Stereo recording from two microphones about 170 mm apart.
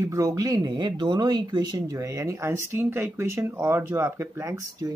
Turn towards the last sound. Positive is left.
turn(degrees=-20)  # may be behind; listen again after turning